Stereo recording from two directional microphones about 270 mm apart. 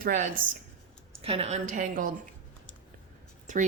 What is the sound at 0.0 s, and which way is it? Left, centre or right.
A woman's voice, right.